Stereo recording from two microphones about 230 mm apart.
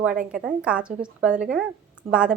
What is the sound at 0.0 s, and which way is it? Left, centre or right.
Speech, centre.